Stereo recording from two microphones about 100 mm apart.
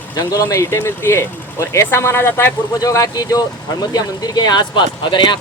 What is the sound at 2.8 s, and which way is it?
Speech, 35° left (ahead or behind).